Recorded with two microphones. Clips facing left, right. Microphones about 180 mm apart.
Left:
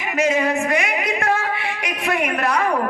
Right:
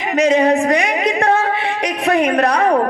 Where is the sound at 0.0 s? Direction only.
35° right (ahead or behind).